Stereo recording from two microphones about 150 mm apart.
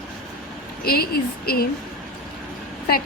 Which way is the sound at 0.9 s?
90° left.